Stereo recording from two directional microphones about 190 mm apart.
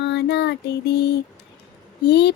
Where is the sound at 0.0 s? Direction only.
65° left (ahead or behind).